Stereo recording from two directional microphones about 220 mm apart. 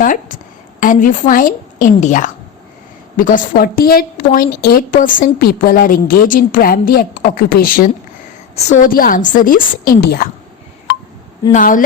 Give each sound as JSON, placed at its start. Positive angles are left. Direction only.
{"t": 0.0, "sound": "a woman's voice", "side_deg": 35}
{"t": 11.5, "sound": "a woman's voice", "side_deg": 35}